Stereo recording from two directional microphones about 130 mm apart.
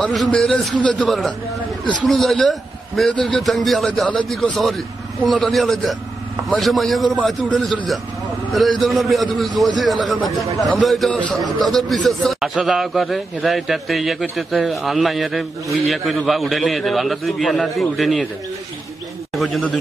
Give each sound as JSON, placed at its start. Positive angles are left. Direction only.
{"t": 0.0, "sound": "a man's voice", "side_deg": 0}
{"t": 19.3, "sound": "a man's voice", "side_deg": 0}